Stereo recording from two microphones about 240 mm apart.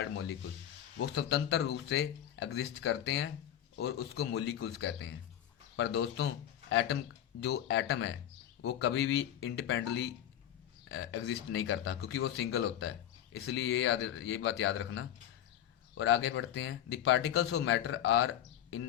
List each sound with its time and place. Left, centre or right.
0.9 s speech: left